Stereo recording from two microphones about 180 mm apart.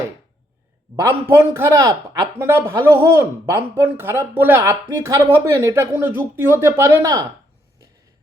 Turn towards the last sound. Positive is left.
turn(degrees=-15)  # may be behind; listen again after turning